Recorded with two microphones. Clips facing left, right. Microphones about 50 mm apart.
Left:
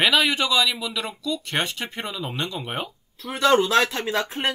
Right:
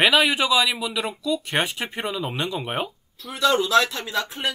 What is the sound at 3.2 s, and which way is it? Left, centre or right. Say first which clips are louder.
Speech: left 2 dB; left.